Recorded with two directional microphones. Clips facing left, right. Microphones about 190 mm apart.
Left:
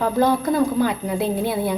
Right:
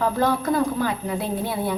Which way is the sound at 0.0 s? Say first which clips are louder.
Left 3 dB; 20° left (ahead or behind).